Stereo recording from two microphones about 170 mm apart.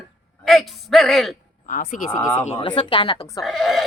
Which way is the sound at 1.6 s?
55° left (ahead or behind).